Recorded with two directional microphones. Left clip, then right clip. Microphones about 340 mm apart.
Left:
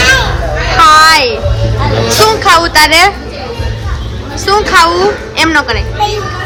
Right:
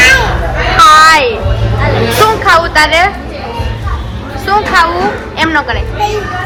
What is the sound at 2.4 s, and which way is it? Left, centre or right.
Speech, centre.